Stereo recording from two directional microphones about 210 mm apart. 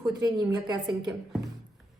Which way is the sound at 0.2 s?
20° right (ahead or behind).